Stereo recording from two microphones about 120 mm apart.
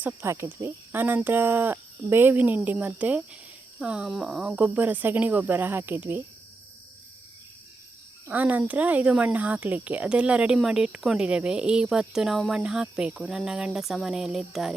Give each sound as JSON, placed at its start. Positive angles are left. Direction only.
{"t": 0.0, "sound": "speech", "side_deg": -20}
{"t": 8.3, "sound": "speech", "side_deg": -15}